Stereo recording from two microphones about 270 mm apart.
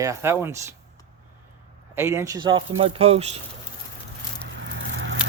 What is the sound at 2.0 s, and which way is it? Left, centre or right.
Speech, centre.